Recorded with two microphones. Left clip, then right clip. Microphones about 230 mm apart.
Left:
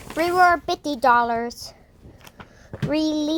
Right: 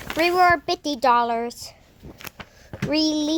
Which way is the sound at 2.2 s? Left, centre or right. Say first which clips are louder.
Right 6 dB; right.